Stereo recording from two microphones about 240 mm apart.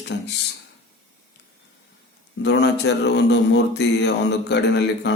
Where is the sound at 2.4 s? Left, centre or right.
Left.